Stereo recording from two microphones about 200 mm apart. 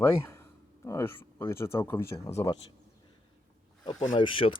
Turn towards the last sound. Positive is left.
turn(degrees=25)  # may be behind; listen again after turning